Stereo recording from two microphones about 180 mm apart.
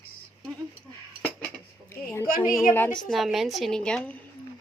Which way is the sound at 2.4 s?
Centre (ahead or behind).